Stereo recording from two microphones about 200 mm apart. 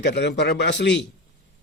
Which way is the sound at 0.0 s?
60° left (ahead or behind).